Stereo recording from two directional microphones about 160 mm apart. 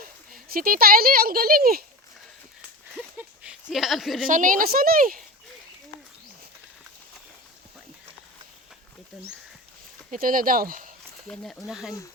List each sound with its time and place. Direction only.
0.3 s speech: 65° right (ahead or behind)
3.2 s a sound: 5° right (ahead or behind)
4.3 s speech: 55° right (ahead or behind)
10.1 s speech: 60° right (ahead or behind)
11.7 s speech: centre (ahead or behind)